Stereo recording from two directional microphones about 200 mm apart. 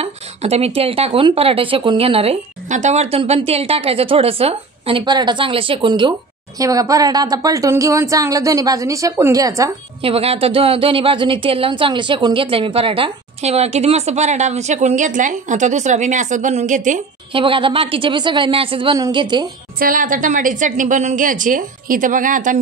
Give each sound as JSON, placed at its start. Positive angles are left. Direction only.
{"t": 0.0, "sound": "a woman's voice", "side_deg": -30}
{"t": 10.0, "sound": "a woman's voice", "side_deg": -30}
{"t": 17.3, "sound": "speech", "side_deg": -25}
{"t": 19.8, "sound": "a woman's voice", "side_deg": -45}